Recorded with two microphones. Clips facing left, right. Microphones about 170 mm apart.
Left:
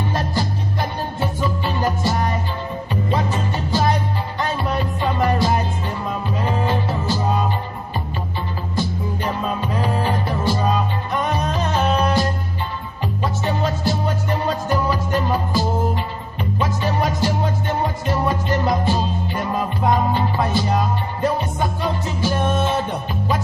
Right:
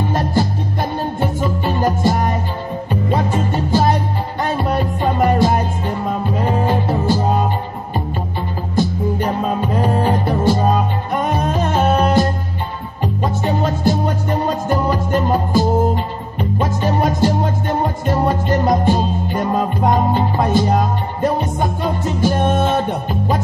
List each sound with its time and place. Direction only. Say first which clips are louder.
0.1 s music: right 5 dB; 50° right (ahead or behind)
8.7 s music: right 7 dB; 45° right (ahead or behind)
13.6 s music: right 4 dB; 45° right (ahead or behind)